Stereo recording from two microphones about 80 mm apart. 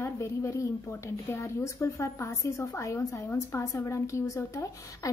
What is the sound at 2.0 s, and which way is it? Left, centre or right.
A woman's voice, left.